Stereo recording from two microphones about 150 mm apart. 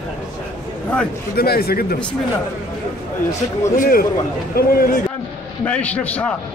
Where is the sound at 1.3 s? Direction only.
90° left.